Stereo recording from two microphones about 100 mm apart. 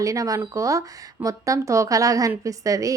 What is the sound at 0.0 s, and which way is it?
Speech, 35° right (ahead or behind).